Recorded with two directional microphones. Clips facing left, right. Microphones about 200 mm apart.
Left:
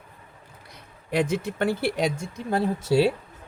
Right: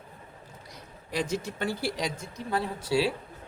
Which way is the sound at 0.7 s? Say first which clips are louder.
Left 7 dB; 60° left (ahead or behind).